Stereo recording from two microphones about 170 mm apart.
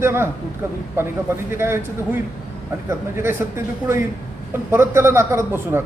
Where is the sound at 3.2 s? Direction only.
15° right (ahead or behind).